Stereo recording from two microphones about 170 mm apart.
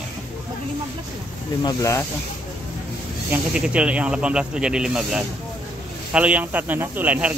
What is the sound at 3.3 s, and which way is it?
A man's voice, 5° right (ahead or behind).